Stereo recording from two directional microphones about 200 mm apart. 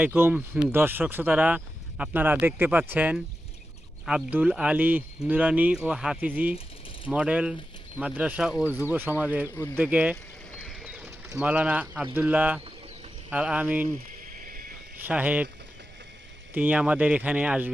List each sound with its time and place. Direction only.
0.0 s speech: 10° right (ahead or behind)
10.5 s a sound: 5° left (ahead or behind)
11.3 s speech: 5° right (ahead or behind)
14.3 s a sound: 45° right (ahead or behind)
15.0 s speech: 10° right (ahead or behind)
16.6 s speech: 10° right (ahead or behind)